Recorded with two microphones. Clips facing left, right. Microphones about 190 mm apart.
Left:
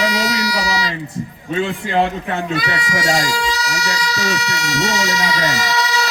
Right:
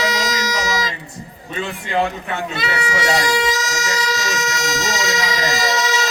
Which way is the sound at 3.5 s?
45° right (ahead or behind).